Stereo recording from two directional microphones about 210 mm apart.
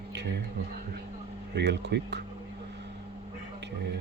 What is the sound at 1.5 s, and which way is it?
Speech, 55° right (ahead or behind).